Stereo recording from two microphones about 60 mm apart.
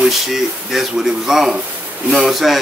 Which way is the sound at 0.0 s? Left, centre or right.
Centre.